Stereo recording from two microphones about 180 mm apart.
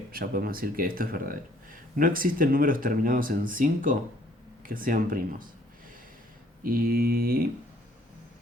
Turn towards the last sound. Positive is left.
turn(degrees=-55)  # may be behind; listen again after turning